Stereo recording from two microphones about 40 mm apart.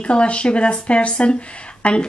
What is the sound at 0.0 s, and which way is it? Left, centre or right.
A woman's voice, left.